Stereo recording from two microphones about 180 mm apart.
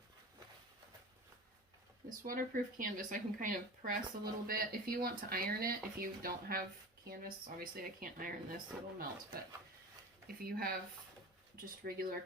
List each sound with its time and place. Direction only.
2.0 s speech: 50° right (ahead or behind)
10.2 s speech: 55° right (ahead or behind)